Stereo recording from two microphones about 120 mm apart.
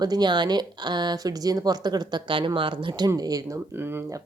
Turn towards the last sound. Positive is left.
turn(degrees=-20)  # may be behind; listen again after turning